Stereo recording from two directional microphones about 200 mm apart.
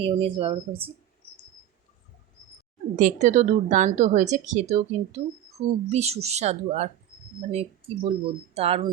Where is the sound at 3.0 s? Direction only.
40° right (ahead or behind).